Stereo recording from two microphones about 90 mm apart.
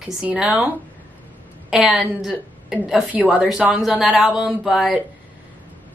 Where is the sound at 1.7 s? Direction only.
5° right (ahead or behind).